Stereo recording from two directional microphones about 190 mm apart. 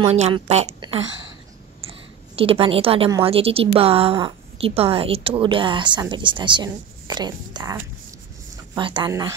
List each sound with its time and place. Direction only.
0.0 s a woman's voice: 30° right (ahead or behind)
2.3 s a woman's voice: 30° right (ahead or behind)
8.7 s a woman's voice: 25° right (ahead or behind)